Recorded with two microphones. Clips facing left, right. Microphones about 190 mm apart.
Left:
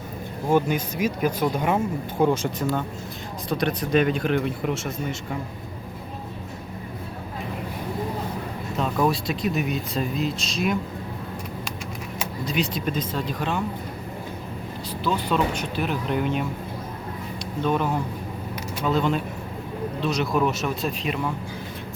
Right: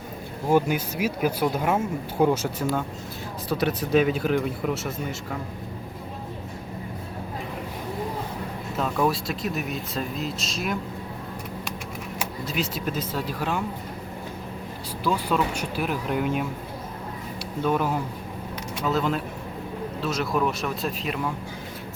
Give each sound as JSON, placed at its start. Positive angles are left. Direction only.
{"t": 0.4, "sound": "speech", "side_deg": -10}
{"t": 9.0, "sound": "speech", "side_deg": 0}
{"t": 12.2, "sound": "speech", "side_deg": -5}
{"t": 15.0, "sound": "speech", "side_deg": -10}
{"t": 17.6, "sound": "speech", "side_deg": -5}